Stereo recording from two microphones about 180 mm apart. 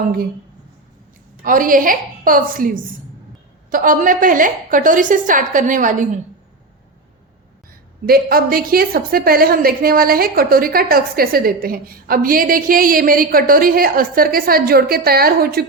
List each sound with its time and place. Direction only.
1.5 s a woman's voice: 50° right (ahead or behind)
8.0 s a woman's voice: 55° right (ahead or behind)